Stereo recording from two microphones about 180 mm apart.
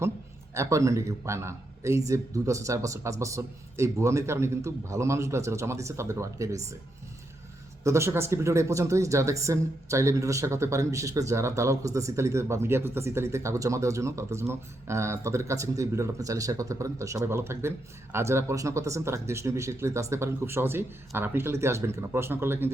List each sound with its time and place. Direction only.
0.5 s speech: 15° right (ahead or behind)
7.9 s speech: 15° right (ahead or behind)